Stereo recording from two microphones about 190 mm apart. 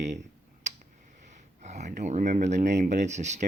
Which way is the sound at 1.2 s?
40° right (ahead or behind).